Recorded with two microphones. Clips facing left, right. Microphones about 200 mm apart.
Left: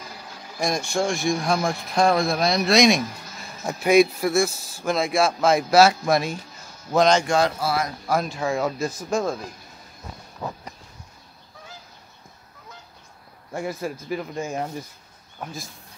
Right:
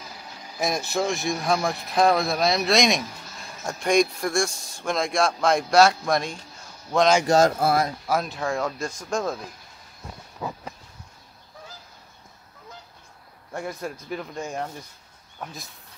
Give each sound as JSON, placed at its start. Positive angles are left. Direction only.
{"t": 0.6, "sound": "speech", "side_deg": -5}
{"t": 7.2, "sound": "speech", "side_deg": -45}
{"t": 8.1, "sound": "speech", "side_deg": 0}
{"t": 13.6, "sound": "speech", "side_deg": 5}